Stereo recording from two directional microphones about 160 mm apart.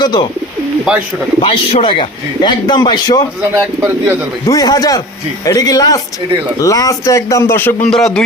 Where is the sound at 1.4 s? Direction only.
35° left (ahead or behind).